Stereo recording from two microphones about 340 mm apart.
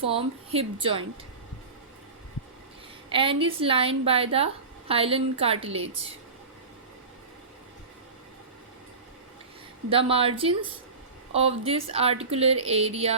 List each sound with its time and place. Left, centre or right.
0.1 s speech: centre
3.1 s a woman's voice: centre
9.9 s speech: centre